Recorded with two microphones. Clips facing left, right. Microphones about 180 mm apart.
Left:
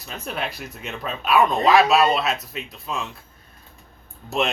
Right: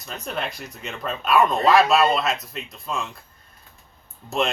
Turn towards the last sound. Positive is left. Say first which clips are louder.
# even
turn(degrees=0)  # may be behind; listen again after turning